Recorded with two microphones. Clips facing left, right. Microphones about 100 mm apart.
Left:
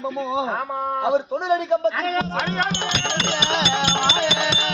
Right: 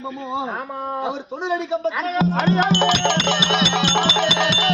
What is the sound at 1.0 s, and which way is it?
Speech, 60° left (ahead or behind).